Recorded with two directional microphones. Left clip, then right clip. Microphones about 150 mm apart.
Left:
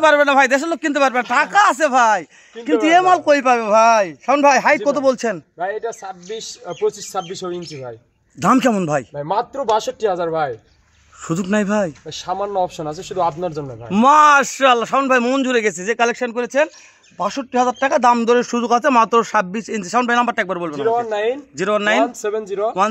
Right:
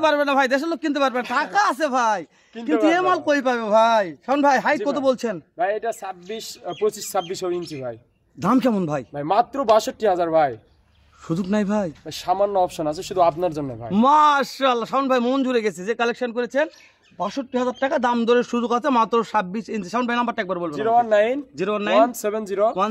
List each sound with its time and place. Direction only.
0.0 s a man's voice: 40° left (ahead or behind)
5.6 s a man's voice: 40° right (ahead or behind)
8.4 s a man's voice: 40° left (ahead or behind)
9.1 s a man's voice: 45° right (ahead or behind)
11.2 s a man's voice: 35° left (ahead or behind)
12.3 s a man's voice: 40° right (ahead or behind)
13.8 s a man's voice: 35° left (ahead or behind)
20.9 s a man's voice: 35° right (ahead or behind)
21.5 s a man's voice: 45° left (ahead or behind)
22.0 s a man's voice: 35° right (ahead or behind)